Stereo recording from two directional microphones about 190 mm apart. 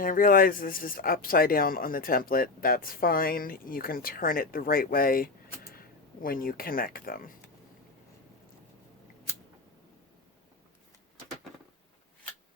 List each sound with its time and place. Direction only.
0.0 s speech: 45° left (ahead or behind)